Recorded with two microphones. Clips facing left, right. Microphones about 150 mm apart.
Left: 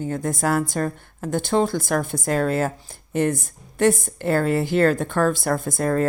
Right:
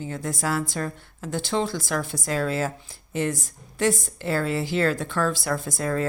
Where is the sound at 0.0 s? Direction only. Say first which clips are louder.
Left 5 dB; 50° left (ahead or behind).